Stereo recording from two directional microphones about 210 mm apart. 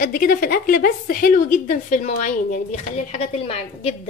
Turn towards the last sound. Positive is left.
turn(degrees=30)  # may be behind; listen again after turning